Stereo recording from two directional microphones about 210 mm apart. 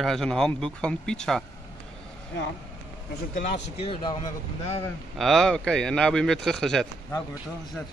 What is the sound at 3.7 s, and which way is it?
Speech, 25° left (ahead or behind).